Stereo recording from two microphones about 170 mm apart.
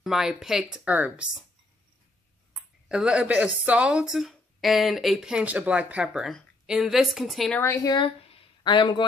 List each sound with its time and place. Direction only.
0.0 s speech: centre (ahead or behind)
2.5 s speech: 5° right (ahead or behind)
7.6 s speech: 20° left (ahead or behind)
8.0 s a sound: 30° left (ahead or behind)